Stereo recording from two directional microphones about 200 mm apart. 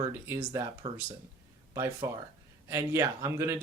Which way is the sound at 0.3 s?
15° right (ahead or behind).